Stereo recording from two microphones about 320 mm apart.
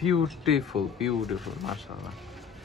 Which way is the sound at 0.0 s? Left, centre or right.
Centre.